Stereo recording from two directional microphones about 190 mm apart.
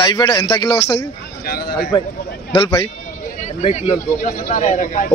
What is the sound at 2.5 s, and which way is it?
Speech, 25° left (ahead or behind).